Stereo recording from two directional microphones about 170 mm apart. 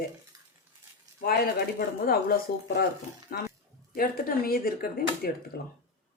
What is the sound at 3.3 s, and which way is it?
Speech, 65° left (ahead or behind).